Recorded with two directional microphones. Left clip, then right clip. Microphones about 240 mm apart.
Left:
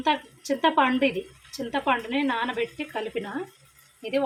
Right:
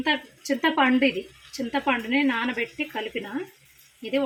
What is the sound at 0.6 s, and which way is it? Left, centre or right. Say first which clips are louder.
Speech: even; centre.